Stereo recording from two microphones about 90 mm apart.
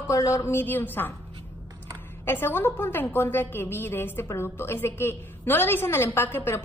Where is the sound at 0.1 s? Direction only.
35° left (ahead or behind); by 1.1 s 20° left (ahead or behind).